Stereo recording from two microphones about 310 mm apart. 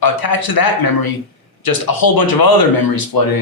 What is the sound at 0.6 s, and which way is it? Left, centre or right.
Speech, left.